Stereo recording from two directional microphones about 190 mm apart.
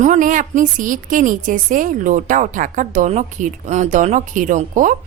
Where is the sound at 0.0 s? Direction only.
40° right (ahead or behind).